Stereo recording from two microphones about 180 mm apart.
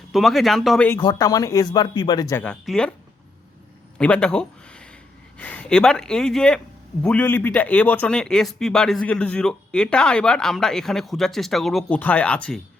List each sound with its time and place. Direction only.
0.1 s speech: centre (ahead or behind)
0.9 s speech: 20° left (ahead or behind)
2.4 s speech: 5° left (ahead or behind)
3.9 s a sound: 5° left (ahead or behind)
5.4 s speech: 5° left (ahead or behind)